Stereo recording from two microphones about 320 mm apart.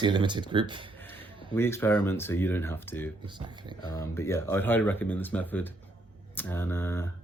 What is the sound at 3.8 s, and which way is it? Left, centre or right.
Speech, centre.